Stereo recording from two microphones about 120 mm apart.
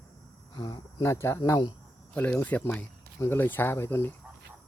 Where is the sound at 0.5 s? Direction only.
40° left (ahead or behind).